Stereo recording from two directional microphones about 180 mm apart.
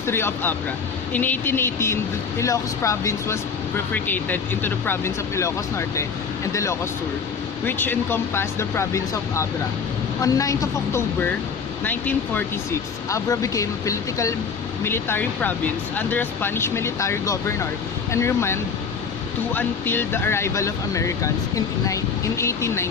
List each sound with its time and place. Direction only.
0.1 s speech: 15° left (ahead or behind)